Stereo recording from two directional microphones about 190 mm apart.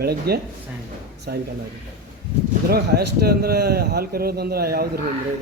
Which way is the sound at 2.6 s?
55° right (ahead or behind).